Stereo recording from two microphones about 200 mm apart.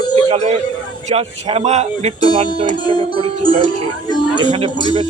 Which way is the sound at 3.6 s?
20° left (ahead or behind).